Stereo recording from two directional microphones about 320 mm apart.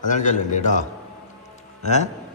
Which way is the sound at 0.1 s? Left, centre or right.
Left.